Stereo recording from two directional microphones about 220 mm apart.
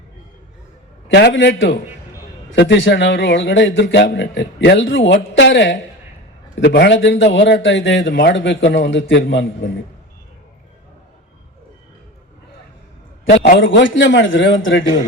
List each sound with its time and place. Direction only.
1.0 s a man's voice: 55° left (ahead or behind)
13.4 s a man's voice: 50° left (ahead or behind)